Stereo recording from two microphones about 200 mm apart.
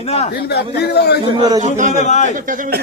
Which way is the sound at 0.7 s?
55° left (ahead or behind).